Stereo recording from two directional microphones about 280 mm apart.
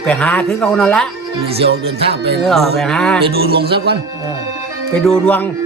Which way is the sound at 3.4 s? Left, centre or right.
Right.